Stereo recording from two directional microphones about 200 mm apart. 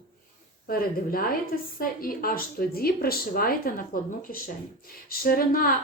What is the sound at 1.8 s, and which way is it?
A woman's voice, 45° left (ahead or behind).